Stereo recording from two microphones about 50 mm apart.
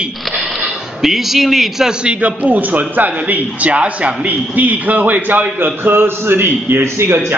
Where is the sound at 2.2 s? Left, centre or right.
Right.